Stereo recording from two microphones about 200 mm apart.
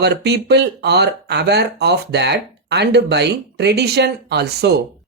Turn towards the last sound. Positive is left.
turn(degrees=-55)  # may be behind; listen again after turning